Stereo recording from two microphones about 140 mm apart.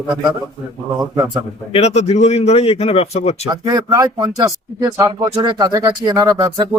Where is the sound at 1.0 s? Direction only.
25° right (ahead or behind).